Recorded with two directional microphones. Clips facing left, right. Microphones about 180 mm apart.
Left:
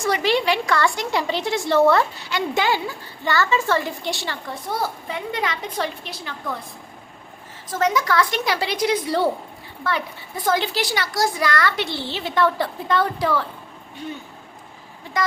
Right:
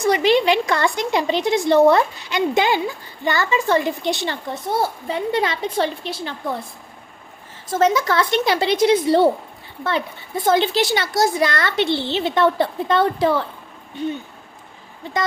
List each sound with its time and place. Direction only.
0.0 s a woman's voice: 20° right (ahead or behind)
7.7 s a woman's voice: 25° right (ahead or behind)